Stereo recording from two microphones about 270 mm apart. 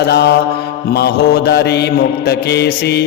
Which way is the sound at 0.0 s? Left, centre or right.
Left.